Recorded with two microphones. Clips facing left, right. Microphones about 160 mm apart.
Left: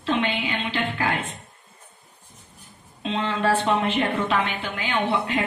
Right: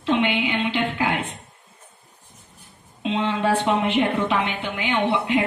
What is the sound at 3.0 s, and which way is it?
A woman's voice, 15° right (ahead or behind).